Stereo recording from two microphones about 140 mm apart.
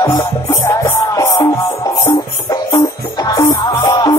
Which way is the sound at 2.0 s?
30° left (ahead or behind).